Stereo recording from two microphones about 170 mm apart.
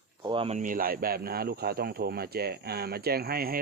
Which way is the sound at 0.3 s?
35° right (ahead or behind).